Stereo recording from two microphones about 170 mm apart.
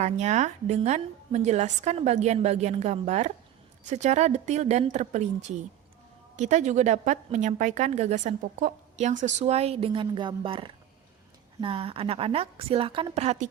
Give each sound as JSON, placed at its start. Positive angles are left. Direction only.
{"t": 0.0, "sound": "a woman's voice", "side_deg": -45}